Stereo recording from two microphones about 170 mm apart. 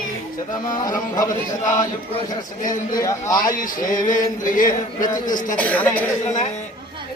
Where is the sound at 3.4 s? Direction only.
55° left (ahead or behind).